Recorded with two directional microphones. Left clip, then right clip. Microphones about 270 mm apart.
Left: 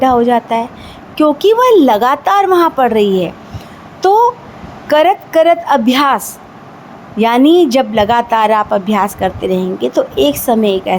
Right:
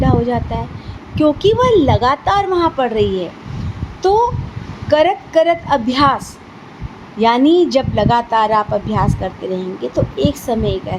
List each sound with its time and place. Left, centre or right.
0.0 s a woman's voice: left